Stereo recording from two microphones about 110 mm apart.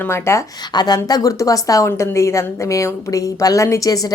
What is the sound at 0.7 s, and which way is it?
A woman's voice, 40° left (ahead or behind).